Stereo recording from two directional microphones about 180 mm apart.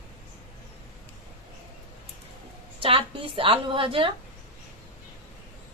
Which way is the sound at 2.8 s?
30° right (ahead or behind).